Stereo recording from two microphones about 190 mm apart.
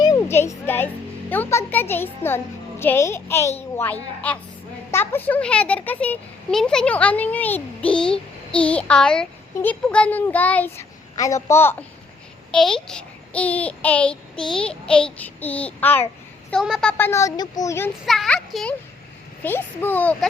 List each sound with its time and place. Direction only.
0.0 s a sound: 15° left (ahead or behind)
1.3 s a child's voice: 10° left (ahead or behind)
16.5 s a child's voice: centre (ahead or behind)
17.0 s a child's voice: 15° left (ahead or behind)
18.0 s a child's voice: centre (ahead or behind)